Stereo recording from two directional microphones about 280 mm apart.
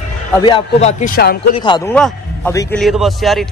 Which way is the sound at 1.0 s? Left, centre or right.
Left.